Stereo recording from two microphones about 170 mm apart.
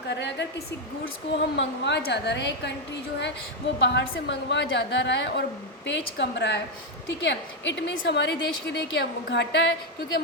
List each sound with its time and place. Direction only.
0.1 s a woman's voice: 90° left